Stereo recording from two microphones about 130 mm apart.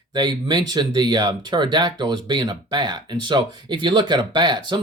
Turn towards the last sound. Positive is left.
turn(degrees=-35)  # may be behind; listen again after turning